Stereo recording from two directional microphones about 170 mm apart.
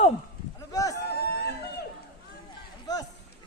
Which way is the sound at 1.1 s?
75° left (ahead or behind).